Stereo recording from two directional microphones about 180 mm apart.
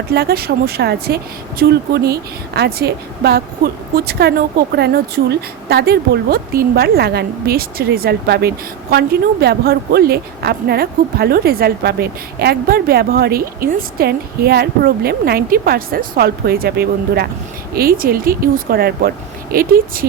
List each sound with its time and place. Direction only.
0.1 s speech: 60° right (ahead or behind)